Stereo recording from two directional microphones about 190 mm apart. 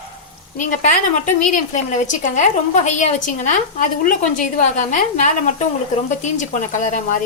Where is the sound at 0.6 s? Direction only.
45° left (ahead or behind).